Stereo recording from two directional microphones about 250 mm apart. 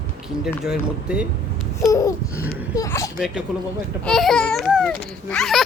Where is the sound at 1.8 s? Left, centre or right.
Centre.